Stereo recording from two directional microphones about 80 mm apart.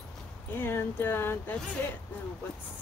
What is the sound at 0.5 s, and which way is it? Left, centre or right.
Speech, left.